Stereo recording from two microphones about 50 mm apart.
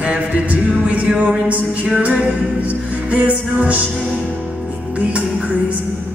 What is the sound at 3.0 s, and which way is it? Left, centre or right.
Music, right.